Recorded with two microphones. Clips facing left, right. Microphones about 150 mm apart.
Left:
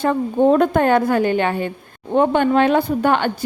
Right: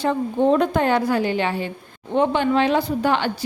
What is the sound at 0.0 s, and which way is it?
A woman's voice, 50° left (ahead or behind).